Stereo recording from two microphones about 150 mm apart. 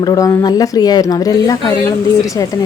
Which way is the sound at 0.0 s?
25° left (ahead or behind).